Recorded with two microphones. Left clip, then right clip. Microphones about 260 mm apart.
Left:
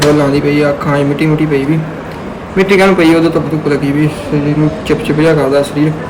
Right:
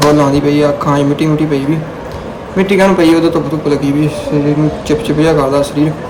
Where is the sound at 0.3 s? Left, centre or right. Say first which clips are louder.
Even; right.